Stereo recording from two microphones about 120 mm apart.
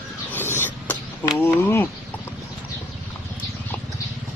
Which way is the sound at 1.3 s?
20° left (ahead or behind).